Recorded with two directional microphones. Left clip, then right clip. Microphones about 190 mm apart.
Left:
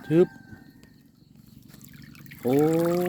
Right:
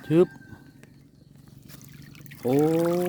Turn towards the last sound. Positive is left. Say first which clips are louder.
# even
turn(degrees=-5)  # may be behind; listen again after turning